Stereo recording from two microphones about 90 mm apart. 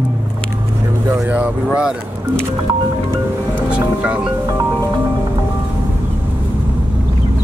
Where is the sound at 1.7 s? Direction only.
5° right (ahead or behind).